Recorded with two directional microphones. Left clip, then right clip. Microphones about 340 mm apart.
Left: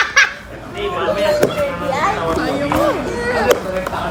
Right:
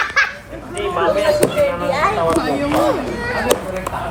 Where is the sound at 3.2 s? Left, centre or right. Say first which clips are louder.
Left 5 dB; left.